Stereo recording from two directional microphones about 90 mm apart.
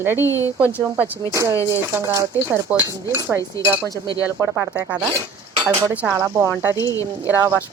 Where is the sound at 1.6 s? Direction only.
30° left (ahead or behind).